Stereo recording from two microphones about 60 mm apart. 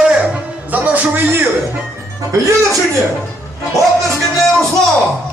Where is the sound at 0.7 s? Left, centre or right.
Right.